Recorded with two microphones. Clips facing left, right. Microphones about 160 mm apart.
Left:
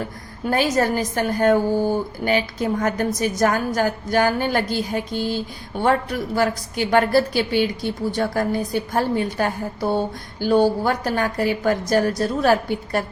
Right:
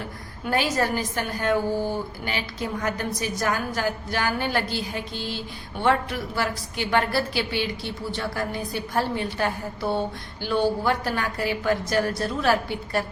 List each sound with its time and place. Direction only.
0.5 s a woman's voice: 45° left (ahead or behind)